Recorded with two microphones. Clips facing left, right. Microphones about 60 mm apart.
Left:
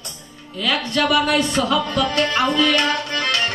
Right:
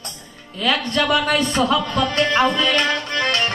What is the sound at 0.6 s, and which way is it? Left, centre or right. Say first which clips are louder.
Music: even; right.